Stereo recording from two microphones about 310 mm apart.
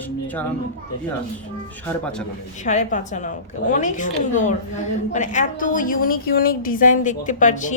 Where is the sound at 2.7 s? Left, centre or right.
Left.